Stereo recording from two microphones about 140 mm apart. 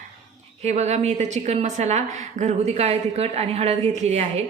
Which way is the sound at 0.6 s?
50° right (ahead or behind).